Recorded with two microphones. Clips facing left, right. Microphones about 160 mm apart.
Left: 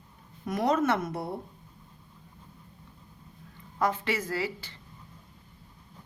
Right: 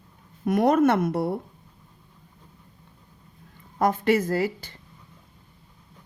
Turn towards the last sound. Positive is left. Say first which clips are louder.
# right 7 dB
turn(degrees=-45)  # may be behind; listen again after turning